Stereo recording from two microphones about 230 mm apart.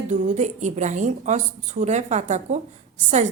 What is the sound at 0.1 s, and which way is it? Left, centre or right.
A woman's voice, right.